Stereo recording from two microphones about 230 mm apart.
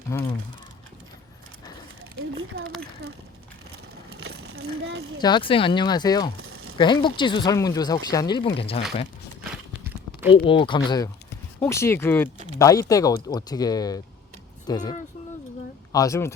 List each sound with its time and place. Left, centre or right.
0.1 s speech: centre
4.2 s a sound: right
5.2 s speech: left
6.4 s a sound: right
6.7 s speech: centre
10.4 s speech: left
15.9 s speech: centre